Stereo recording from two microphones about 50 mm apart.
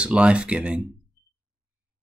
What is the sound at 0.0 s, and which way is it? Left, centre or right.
Speech, right.